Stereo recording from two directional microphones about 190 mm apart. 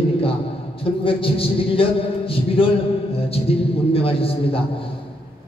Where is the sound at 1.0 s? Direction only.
30° left (ahead or behind).